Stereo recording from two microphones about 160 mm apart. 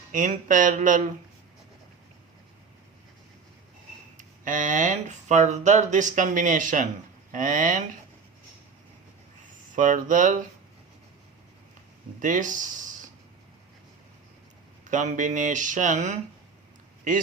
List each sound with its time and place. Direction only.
0.1 s speech: 55° right (ahead or behind)
4.2 s speech: 55° right (ahead or behind)
9.7 s speech: 55° right (ahead or behind)
12.2 s speech: 55° right (ahead or behind)
14.8 s speech: 50° right (ahead or behind)